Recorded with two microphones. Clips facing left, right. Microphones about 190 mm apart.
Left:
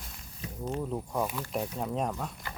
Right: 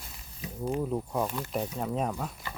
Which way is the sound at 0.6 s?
10° right (ahead or behind).